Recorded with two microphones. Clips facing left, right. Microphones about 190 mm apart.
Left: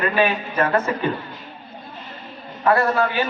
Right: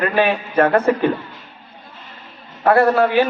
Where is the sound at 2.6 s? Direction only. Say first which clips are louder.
Right 5 dB; 60° right (ahead or behind).